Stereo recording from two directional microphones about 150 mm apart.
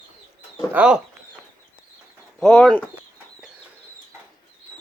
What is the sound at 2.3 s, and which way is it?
Speech, 5° left (ahead or behind).